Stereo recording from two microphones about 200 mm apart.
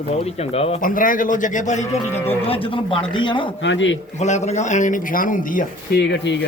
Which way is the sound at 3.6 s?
65° left (ahead or behind).